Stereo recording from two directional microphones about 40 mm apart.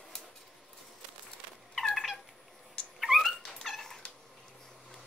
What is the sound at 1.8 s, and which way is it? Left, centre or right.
Cat, centre.